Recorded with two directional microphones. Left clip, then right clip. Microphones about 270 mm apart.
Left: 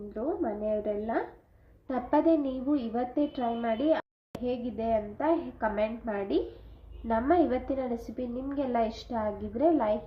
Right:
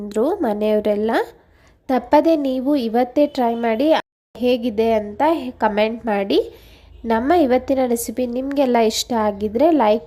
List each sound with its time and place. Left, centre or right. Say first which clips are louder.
0.1 s a woman's voice: right 13 dB; right